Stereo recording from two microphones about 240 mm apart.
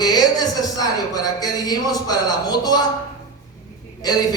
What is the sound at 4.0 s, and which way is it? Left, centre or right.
Speech, centre.